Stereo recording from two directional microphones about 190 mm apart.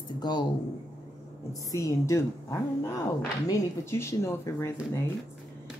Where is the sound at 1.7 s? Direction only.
15° left (ahead or behind).